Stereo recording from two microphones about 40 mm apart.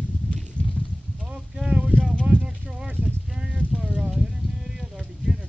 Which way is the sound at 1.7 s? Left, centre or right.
Right.